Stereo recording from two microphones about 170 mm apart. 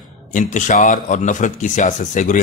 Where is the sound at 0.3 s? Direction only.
45° left (ahead or behind).